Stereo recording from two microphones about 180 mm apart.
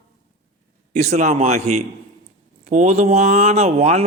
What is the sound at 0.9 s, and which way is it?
A man's voice, 40° right (ahead or behind).